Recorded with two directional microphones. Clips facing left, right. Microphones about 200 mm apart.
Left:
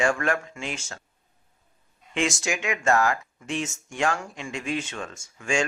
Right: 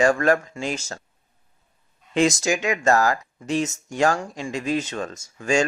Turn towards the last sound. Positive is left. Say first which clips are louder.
# right 5 dB
turn(degrees=-40)  # may be behind; listen again after turning